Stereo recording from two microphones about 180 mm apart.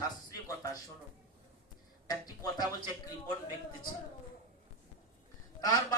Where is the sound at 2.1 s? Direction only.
20° left (ahead or behind).